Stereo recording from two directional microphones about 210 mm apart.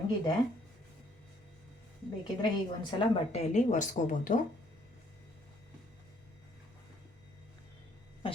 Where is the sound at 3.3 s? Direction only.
35° left (ahead or behind).